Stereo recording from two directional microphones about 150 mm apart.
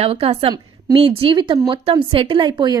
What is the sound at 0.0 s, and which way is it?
Speech, 40° right (ahead or behind).